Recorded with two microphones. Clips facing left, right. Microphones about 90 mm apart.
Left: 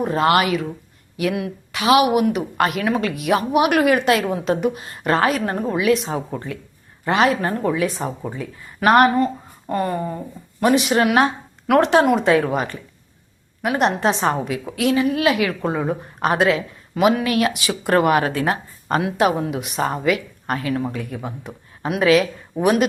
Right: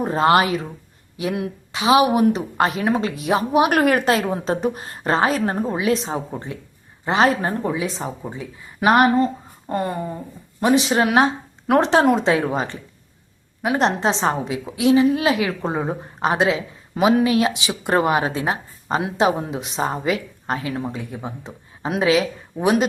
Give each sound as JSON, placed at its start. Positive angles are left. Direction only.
{"t": 0.0, "sound": "a woman's voice", "side_deg": -35}
{"t": 3.7, "sound": "a woman's voice", "side_deg": -45}